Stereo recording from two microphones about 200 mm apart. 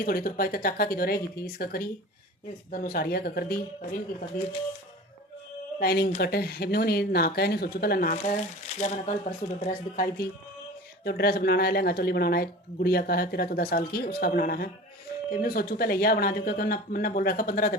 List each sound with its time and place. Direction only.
0.0 s speech: 45° left (ahead or behind)
5.8 s speech: 50° left (ahead or behind)